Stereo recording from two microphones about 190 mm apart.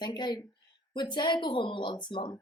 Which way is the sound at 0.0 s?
25° left (ahead or behind).